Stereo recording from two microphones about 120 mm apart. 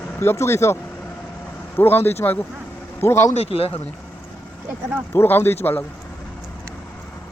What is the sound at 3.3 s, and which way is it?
Speech, 55° left (ahead or behind).